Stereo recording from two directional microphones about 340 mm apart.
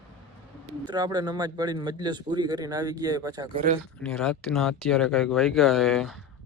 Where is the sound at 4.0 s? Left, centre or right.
Centre.